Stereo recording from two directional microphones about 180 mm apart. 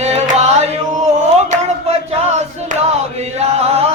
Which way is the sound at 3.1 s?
35° right (ahead or behind).